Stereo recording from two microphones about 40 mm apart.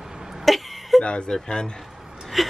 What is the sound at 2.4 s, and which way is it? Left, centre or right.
Speech, centre.